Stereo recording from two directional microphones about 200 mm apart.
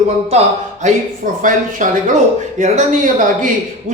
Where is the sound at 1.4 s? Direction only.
40° right (ahead or behind).